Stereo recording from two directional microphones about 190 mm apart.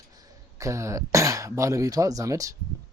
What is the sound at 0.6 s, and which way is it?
Speech, 15° right (ahead or behind).